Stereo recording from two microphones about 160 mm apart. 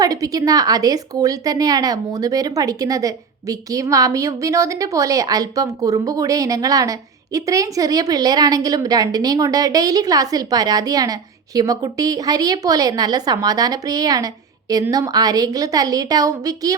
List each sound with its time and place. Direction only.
0.0 s a woman's voice: 20° right (ahead or behind)